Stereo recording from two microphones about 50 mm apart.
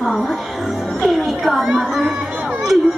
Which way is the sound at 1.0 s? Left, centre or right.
Centre.